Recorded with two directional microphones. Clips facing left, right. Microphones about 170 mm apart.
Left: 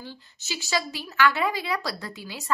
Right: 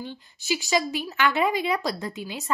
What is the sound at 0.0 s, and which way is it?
A woman's voice, 15° right (ahead or behind).